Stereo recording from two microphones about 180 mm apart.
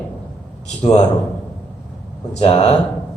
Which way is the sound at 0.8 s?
35° left (ahead or behind).